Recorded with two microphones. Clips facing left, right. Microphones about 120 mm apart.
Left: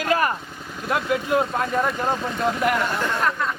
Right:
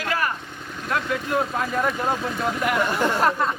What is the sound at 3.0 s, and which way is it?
Speech, 30° right (ahead or behind).